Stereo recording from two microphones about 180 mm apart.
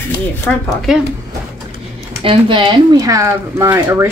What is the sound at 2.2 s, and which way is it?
Speech, 30° right (ahead or behind).